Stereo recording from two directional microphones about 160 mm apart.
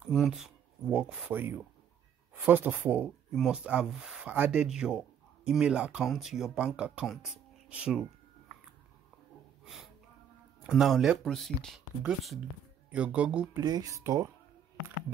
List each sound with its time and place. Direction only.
0.0 s speech: centre (ahead or behind)
10.7 s speech: centre (ahead or behind)
13.6 s speech: 25° right (ahead or behind)